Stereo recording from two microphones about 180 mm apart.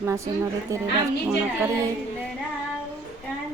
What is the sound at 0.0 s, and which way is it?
Speech, 15° right (ahead or behind).